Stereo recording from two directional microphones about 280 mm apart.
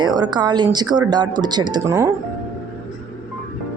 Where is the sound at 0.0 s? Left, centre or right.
Centre.